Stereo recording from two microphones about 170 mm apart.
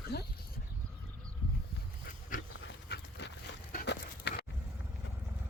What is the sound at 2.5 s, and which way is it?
Dog, 90° left.